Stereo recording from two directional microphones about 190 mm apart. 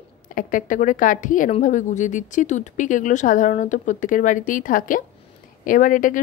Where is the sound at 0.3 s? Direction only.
45° left (ahead or behind).